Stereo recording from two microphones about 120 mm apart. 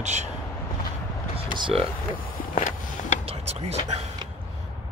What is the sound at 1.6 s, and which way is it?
Speech, 50° right (ahead or behind).